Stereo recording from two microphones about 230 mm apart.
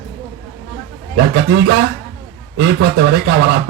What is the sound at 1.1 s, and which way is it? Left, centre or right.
Speech, right.